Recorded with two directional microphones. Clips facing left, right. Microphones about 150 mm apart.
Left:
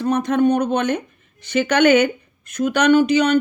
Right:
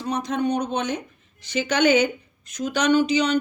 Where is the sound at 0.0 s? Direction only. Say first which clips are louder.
Left 7 dB; 55° left (ahead or behind).